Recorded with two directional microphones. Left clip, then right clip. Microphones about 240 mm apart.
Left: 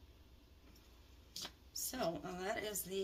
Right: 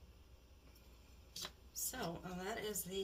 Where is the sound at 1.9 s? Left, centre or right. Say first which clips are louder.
Left 6 dB; left.